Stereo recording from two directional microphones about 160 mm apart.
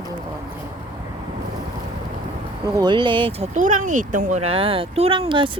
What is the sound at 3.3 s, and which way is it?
Speech, 45° right (ahead or behind).